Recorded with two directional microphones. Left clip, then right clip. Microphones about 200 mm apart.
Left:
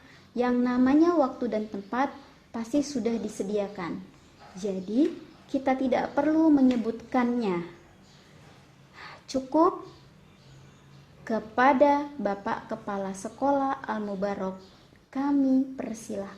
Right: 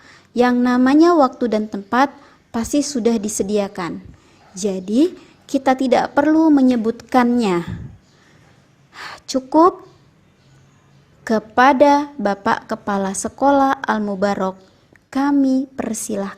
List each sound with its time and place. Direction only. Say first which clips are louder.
0.3 s a woman's voice: right 10 dB; 30° right (ahead or behind)
9.0 s a woman's voice: right 9 dB; 30° right (ahead or behind)
11.2 s a woman's voice: right 10 dB; 25° right (ahead or behind)